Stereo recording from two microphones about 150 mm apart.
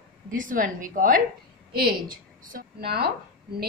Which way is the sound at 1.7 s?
85° right.